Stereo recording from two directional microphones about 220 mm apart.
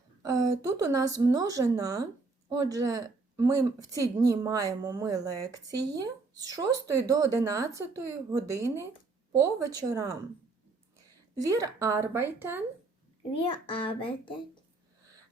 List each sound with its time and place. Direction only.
0.2 s a woman's voice: 15° right (ahead or behind)
11.3 s a woman's voice: 15° right (ahead or behind)
13.5 s speech: 25° left (ahead or behind)